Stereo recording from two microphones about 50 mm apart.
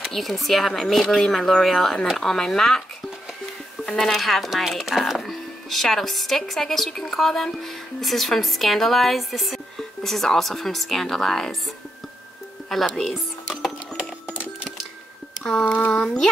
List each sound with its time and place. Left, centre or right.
0.0 s speech: centre
4.0 s speech: centre
12.7 s speech: centre
15.6 s speech: left
15.9 s speech: centre